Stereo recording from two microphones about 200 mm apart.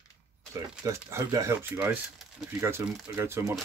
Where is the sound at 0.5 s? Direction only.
15° right (ahead or behind).